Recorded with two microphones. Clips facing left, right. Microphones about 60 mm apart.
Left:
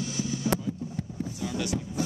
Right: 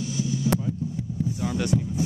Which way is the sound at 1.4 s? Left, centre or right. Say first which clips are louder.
Right 5 dB; right.